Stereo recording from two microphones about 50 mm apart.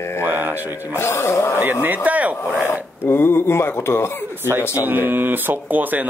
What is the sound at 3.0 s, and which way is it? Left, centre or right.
Speech, left.